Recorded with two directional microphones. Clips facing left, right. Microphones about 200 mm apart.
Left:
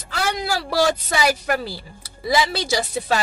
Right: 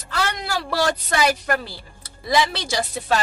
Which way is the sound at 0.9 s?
10° left (ahead or behind).